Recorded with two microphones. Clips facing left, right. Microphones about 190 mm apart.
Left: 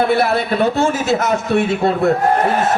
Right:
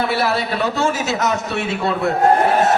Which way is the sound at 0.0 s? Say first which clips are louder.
Left 4 dB; 50° left (ahead or behind).